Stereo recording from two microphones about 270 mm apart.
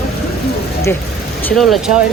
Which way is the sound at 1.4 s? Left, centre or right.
Centre.